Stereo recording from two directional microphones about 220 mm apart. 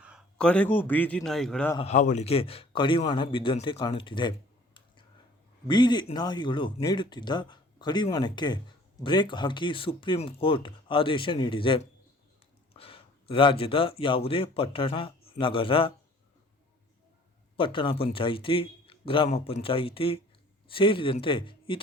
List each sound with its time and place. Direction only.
0.0 s a man's voice: centre (ahead or behind)
1.7 s a man's voice: 30° left (ahead or behind)
17.6 s speech: 25° left (ahead or behind)